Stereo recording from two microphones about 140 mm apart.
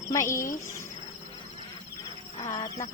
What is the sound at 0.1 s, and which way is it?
Speech, 20° left (ahead or behind).